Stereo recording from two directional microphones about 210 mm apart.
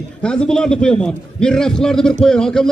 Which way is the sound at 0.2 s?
5° left (ahead or behind).